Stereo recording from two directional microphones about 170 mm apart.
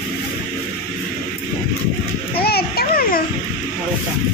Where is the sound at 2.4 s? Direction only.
65° left (ahead or behind).